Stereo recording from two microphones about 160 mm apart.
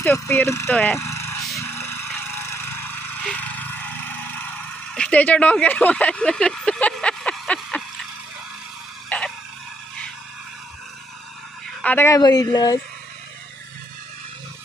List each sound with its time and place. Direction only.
0.0 s speech: 10° left (ahead or behind)
1.6 s vehicle: 15° left (ahead or behind)
9.0 s a sound: 5° left (ahead or behind)
11.8 s speech: 10° left (ahead or behind)